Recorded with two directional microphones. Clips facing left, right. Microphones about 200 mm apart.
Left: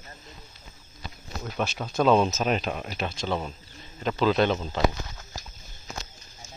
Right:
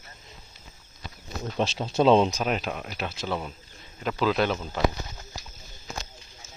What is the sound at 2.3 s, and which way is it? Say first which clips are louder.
Speech: left 2 dB; 5° right (ahead or behind).